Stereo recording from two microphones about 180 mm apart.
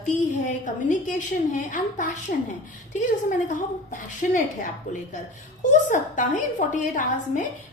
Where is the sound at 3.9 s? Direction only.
45° left (ahead or behind).